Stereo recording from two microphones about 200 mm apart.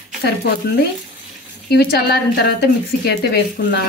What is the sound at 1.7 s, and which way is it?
A woman's voice, 50° left (ahead or behind).